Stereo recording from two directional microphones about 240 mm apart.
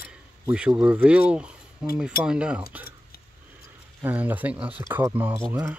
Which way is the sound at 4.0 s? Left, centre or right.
Centre.